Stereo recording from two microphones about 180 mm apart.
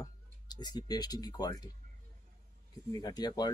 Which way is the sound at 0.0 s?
20° left (ahead or behind).